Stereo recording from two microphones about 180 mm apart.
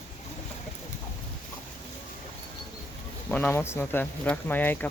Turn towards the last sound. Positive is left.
turn(degrees=10)  # may be behind; listen again after turning